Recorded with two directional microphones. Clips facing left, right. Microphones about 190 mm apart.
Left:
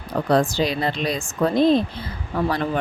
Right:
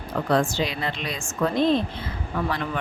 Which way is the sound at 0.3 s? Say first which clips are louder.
Left 4 dB; 35° left (ahead or behind).